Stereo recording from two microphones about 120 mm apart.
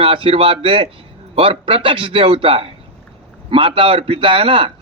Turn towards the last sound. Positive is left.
turn(degrees=-50)  # may be behind; listen again after turning